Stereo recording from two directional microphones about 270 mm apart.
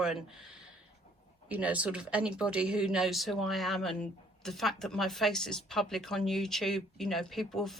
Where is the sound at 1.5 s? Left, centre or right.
Centre.